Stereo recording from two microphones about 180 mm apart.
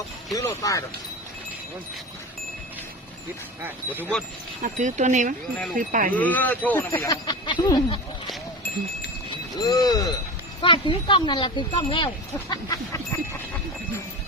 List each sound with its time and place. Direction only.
0.3 s speech: 20° left (ahead or behind)
3.6 s speech: 10° right (ahead or behind)
4.6 s speech: 45° right (ahead or behind)
6.1 s speech: 10° left (ahead or behind)
9.3 s speech: 25° left (ahead or behind)